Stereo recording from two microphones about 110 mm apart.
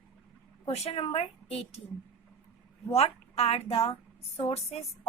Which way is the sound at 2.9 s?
70° left (ahead or behind).